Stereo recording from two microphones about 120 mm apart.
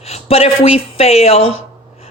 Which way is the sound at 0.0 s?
60° left (ahead or behind).